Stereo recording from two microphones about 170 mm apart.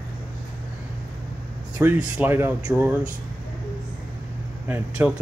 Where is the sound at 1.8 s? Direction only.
10° right (ahead or behind).